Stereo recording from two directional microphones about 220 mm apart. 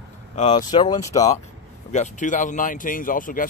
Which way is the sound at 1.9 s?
35° left (ahead or behind).